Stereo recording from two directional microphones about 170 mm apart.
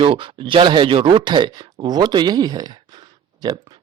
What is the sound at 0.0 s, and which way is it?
A man's voice, 30° right (ahead or behind).